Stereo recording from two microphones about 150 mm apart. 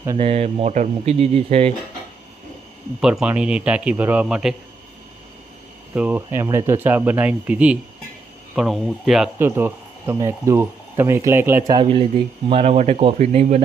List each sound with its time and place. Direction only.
0.2 s speech: 40° right (ahead or behind)
3.0 s speech: 5° right (ahead or behind)
5.9 s speech: 10° right (ahead or behind)
9.4 s speech: 15° right (ahead or behind)
11.7 s speech: 35° right (ahead or behind)